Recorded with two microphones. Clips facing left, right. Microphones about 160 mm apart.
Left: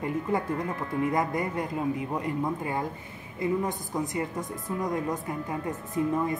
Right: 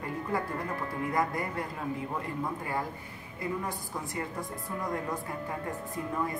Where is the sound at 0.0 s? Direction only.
20° left (ahead or behind).